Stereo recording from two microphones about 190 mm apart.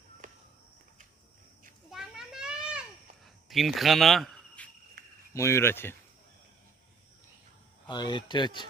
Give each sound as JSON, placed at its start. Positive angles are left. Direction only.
{"t": 1.9, "sound": "children playing", "side_deg": 0}
{"t": 3.5, "sound": "speech", "side_deg": 0}
{"t": 5.0, "sound": "cricket", "side_deg": -55}
{"t": 5.3, "sound": "speech", "side_deg": 15}
{"t": 7.9, "sound": "speech", "side_deg": 25}